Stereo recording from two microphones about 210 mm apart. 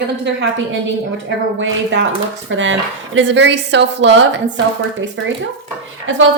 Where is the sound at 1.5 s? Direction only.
65° right (ahead or behind).